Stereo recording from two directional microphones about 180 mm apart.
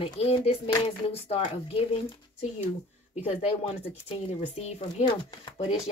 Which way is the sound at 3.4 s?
35° left (ahead or behind).